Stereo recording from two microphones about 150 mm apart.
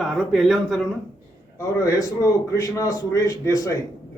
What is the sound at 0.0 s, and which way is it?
Speech, centre (ahead or behind).